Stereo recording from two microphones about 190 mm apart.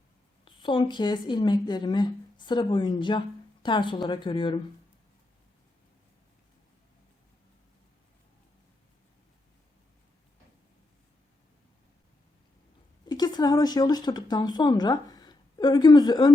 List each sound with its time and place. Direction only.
0.4 s a woman's voice: 25° left (ahead or behind)
13.1 s speech: 20° left (ahead or behind)